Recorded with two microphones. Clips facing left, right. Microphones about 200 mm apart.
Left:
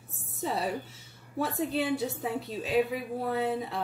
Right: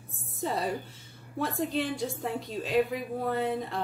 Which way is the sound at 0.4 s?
Centre (ahead or behind).